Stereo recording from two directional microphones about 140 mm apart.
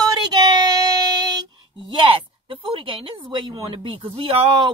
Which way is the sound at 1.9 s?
40° right (ahead or behind).